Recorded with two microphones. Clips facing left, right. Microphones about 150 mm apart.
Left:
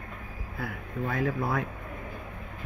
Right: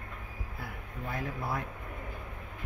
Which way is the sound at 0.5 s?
90° left.